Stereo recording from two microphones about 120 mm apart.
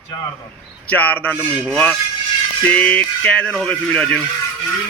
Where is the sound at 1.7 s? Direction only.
5° left (ahead or behind).